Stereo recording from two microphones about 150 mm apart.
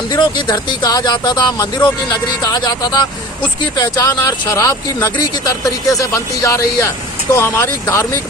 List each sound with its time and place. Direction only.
0.1 s speech: 30° left (ahead or behind)